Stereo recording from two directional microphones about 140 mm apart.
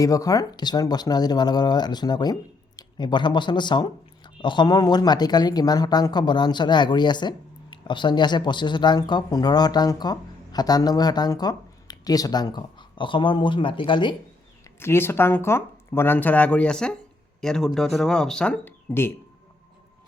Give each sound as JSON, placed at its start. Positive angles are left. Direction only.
{"t": 0.0, "sound": "speech", "side_deg": 25}
{"t": 14.6, "sound": "speech", "side_deg": 15}